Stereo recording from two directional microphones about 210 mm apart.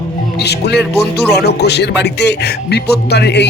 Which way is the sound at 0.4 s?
50° left (ahead or behind).